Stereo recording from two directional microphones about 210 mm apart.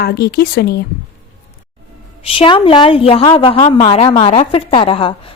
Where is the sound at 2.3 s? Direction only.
25° left (ahead or behind).